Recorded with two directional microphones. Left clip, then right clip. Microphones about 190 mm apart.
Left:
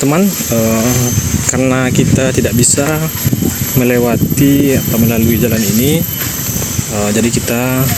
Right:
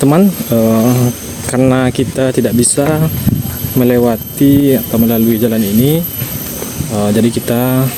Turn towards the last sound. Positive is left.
turn(degrees=-20)  # may be behind; listen again after turning